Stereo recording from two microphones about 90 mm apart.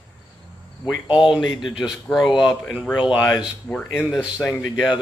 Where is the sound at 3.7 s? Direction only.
15° left (ahead or behind).